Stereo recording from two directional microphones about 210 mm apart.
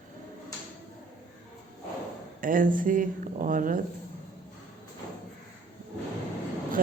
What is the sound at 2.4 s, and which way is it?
Speech, 40° right (ahead or behind).